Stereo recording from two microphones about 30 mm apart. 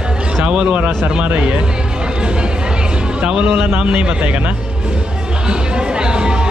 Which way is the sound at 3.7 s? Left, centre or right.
Right.